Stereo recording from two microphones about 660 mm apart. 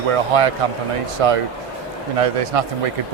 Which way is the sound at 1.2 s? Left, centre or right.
Right.